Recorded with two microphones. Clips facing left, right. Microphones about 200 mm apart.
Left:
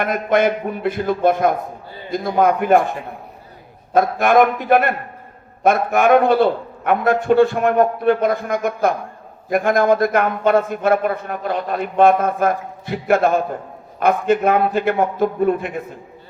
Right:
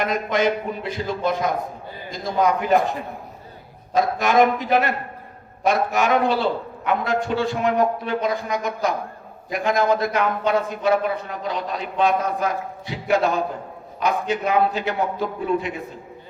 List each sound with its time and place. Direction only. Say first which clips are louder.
0.0 s a man's voice: left 4 dB; 55° left (ahead or behind)
3.9 s a man's voice: left 4 dB; 55° left (ahead or behind)